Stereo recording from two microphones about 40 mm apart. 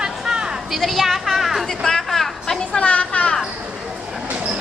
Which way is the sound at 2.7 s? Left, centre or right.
Left.